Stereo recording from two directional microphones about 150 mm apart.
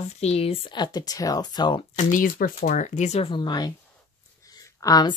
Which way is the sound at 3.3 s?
30° left (ahead or behind).